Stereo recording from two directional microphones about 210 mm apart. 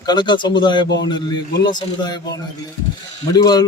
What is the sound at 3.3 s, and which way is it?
Speech, 20° left (ahead or behind).